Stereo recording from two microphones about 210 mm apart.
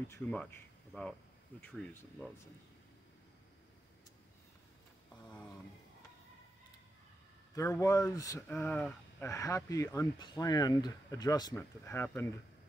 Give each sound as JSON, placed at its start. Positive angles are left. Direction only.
{"t": 0.1, "sound": "speech", "side_deg": 10}
{"t": 7.5, "sound": "speech", "side_deg": 15}